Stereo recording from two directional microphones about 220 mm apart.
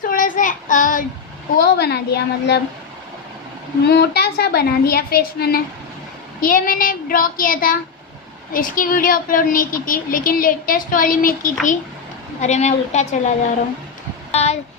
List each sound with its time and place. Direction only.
0.0 s child singing: 35° left (ahead or behind)
1.6 s a woman's voice: 50° left (ahead or behind)
3.8 s a woman's voice: 50° left (ahead or behind); by 13.1 s 30° left (ahead or behind)
14.3 s speech: 30° left (ahead or behind)